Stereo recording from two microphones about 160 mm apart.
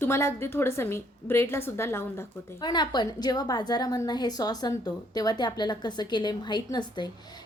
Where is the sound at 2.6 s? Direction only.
25° left (ahead or behind).